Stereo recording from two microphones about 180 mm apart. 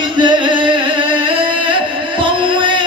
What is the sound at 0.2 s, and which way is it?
Music, 25° right (ahead or behind).